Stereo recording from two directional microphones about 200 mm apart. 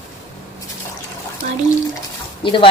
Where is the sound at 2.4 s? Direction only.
25° left (ahead or behind).